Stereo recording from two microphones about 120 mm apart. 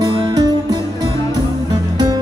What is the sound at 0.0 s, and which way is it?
Music, 35° right (ahead or behind).